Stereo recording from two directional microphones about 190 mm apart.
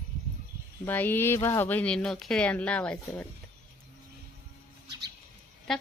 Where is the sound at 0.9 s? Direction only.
10° left (ahead or behind).